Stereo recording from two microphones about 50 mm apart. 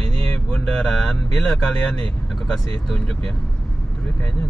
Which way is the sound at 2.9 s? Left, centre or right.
Centre.